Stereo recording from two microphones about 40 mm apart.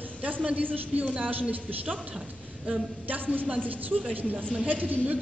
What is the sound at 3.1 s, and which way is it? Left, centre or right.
Speech, right.